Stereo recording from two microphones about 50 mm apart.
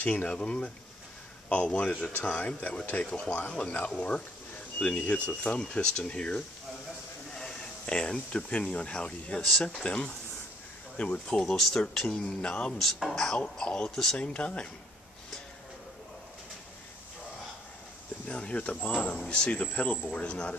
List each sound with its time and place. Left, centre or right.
0.0 s speech: left
0.3 s speech: centre; by 3.6 s left
4.7 s speech: left
9.4 s speech: centre
11.4 s speech: centre
12.2 s speech: centre
12.7 s speech: centre
13.4 s speech: left
18.3 s speech: left